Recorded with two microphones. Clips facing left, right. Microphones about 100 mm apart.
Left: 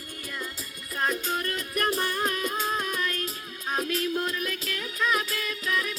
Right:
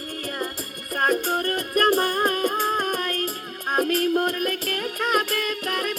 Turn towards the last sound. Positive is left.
turn(degrees=-60)  # may be behind; listen again after turning